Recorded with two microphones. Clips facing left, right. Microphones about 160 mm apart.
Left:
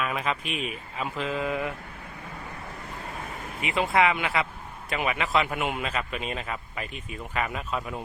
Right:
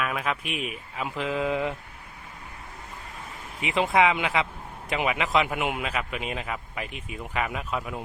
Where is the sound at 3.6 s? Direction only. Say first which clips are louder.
Right 1 dB; 20° right (ahead or behind).